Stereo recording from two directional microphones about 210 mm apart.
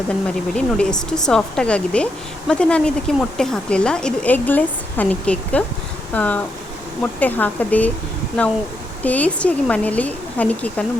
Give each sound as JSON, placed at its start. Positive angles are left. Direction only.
{"t": 0.5, "sound": "speech", "side_deg": 5}
{"t": 9.0, "sound": "speech", "side_deg": 5}